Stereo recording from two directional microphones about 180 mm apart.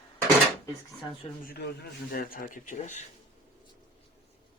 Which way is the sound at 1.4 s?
65° left (ahead or behind).